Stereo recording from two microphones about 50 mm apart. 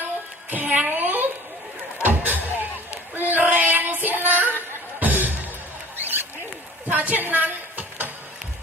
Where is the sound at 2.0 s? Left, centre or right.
Right.